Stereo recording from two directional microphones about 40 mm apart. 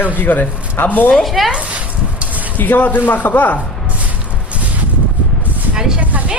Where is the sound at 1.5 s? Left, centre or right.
Right.